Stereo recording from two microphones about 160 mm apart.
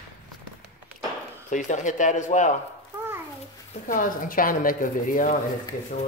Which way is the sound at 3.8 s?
55° left (ahead or behind).